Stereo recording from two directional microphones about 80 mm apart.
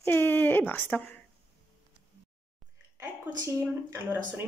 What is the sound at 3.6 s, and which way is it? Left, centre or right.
Speech, right.